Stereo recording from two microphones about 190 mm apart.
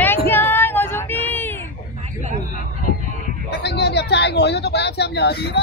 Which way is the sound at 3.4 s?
60° left (ahead or behind).